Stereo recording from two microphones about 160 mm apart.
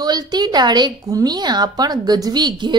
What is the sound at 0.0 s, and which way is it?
A woman's voice, 25° right (ahead or behind).